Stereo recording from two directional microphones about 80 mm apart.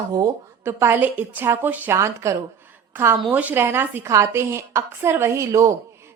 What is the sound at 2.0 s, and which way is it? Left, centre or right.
A woman's voice, right.